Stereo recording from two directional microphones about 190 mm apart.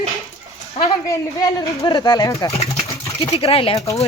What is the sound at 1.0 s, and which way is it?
Speech, 15° left (ahead or behind).